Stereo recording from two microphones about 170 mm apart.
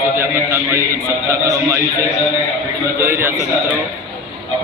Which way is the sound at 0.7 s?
15° right (ahead or behind).